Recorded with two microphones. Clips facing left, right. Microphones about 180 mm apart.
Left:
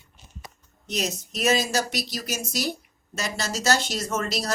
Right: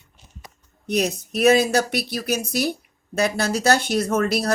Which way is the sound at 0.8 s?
60° right (ahead or behind).